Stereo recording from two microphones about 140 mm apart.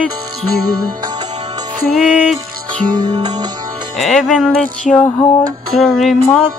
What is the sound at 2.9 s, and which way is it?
Music, 30° right (ahead or behind).